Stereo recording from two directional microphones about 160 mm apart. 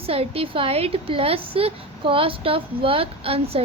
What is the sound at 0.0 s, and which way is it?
A woman's voice, 40° right (ahead or behind).